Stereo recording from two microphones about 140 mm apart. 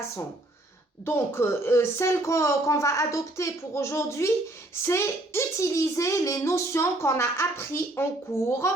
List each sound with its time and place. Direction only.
1.0 s speech: 15° left (ahead or behind)